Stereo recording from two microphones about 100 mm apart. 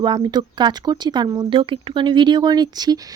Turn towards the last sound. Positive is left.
turn(degrees=-40)  # may be behind; listen again after turning